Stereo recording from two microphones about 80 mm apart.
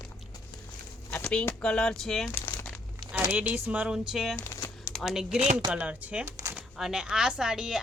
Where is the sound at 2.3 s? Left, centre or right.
Left.